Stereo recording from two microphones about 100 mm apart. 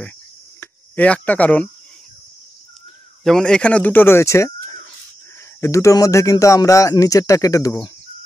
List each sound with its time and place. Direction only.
0.6 s speech: 15° left (ahead or behind)
3.3 s speech: 5° left (ahead or behind); by 7.7 s 35° left (ahead or behind)